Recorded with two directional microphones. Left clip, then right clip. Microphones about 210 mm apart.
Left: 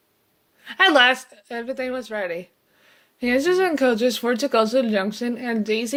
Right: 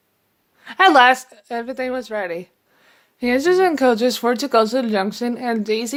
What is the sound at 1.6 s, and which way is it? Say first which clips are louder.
Speech: right 1 dB; 20° right (ahead or behind).